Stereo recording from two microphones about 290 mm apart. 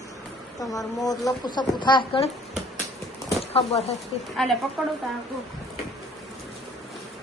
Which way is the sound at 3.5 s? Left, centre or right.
Left.